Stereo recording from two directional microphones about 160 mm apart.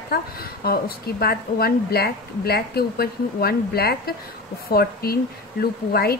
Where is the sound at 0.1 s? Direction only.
70° left (ahead or behind).